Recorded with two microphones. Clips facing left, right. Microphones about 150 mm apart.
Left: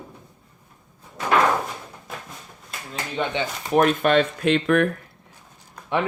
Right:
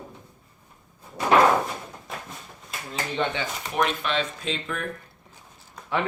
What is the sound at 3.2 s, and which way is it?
Speech, 10° left (ahead or behind).